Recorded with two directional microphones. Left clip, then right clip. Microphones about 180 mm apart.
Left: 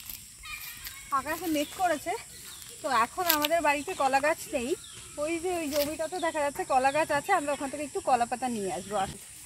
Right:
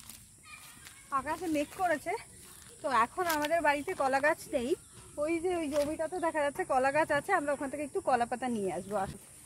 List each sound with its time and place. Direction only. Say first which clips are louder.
1.1 s speech: left 3 dB; 15° right (ahead or behind)